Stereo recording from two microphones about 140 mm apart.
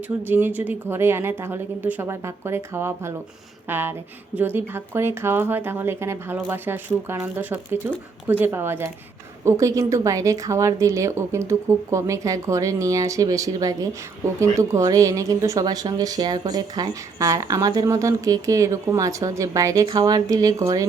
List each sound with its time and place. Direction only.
0.3 s a woman's voice: 15° right (ahead or behind)